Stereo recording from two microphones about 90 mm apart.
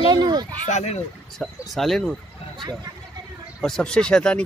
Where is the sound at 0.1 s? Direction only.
55° right (ahead or behind).